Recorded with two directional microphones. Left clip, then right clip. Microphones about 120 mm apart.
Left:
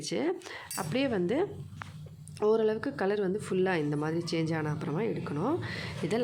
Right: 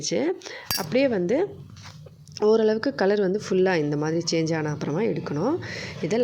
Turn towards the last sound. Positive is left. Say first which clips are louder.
# right 6 dB
turn(degrees=-25)  # may be behind; listen again after turning